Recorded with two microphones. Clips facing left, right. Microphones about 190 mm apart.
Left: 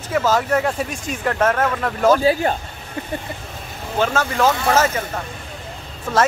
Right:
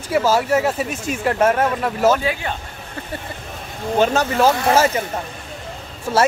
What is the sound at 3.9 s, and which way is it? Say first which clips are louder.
Speech: right 3 dB; 20° right (ahead or behind).